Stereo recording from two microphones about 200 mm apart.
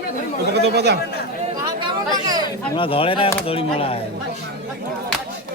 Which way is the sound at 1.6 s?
20° right (ahead or behind).